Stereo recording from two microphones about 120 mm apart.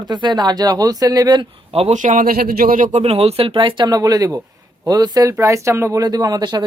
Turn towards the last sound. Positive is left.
turn(degrees=-35)  # may be behind; listen again after turning